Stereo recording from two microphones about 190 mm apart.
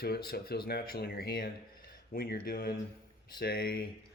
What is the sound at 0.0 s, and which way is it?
Speech, 55° left (ahead or behind).